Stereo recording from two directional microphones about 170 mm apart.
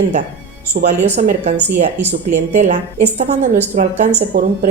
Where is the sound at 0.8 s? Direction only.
45° right (ahead or behind).